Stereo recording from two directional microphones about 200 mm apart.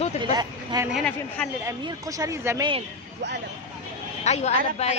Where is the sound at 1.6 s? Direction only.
20° right (ahead or behind).